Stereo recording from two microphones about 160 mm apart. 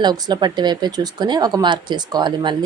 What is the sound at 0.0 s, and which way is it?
Speech, 25° right (ahead or behind).